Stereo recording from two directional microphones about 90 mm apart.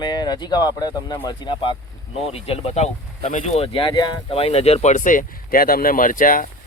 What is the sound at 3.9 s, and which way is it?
Speech, 50° left (ahead or behind).